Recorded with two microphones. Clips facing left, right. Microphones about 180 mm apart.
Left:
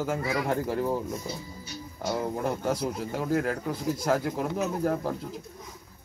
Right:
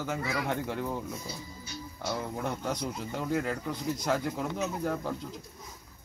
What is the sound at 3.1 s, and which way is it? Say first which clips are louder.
Speech: left 3 dB; 5° left (ahead or behind).